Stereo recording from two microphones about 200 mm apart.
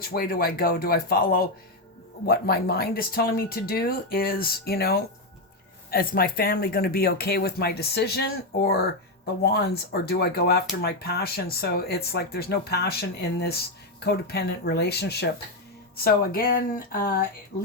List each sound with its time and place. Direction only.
0.1 s speech: 50° left (ahead or behind)